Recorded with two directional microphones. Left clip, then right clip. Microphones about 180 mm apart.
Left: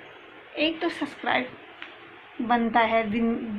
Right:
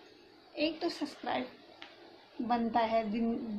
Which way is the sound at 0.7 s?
20° left (ahead or behind).